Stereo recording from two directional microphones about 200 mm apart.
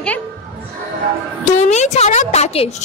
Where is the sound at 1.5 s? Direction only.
35° left (ahead or behind).